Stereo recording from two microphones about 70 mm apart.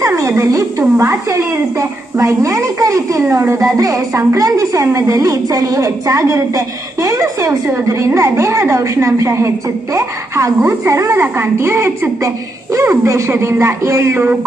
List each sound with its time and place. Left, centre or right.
0.0 s a sound: right
0.4 s a woman's voice: right
3.3 s a woman's voice: right
7.7 s a woman's voice: right